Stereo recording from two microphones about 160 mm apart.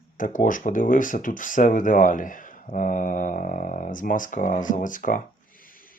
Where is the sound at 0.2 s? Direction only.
55° left (ahead or behind).